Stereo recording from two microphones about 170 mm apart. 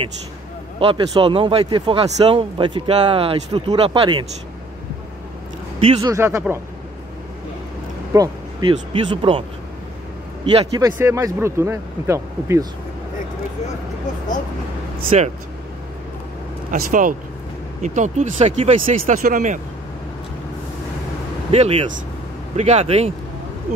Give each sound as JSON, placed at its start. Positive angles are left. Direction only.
{"t": 0.7, "sound": "speech", "side_deg": -30}
{"t": 5.8, "sound": "speech", "side_deg": -30}
{"t": 6.1, "sound": "speech", "side_deg": -15}
{"t": 8.1, "sound": "speech", "side_deg": -20}
{"t": 10.4, "sound": "speech", "side_deg": -25}
{"t": 10.9, "sound": "speech", "side_deg": -15}
{"t": 15.0, "sound": "speech", "side_deg": -40}
{"t": 16.7, "sound": "speech", "side_deg": -50}
{"t": 21.5, "sound": "speech", "side_deg": -35}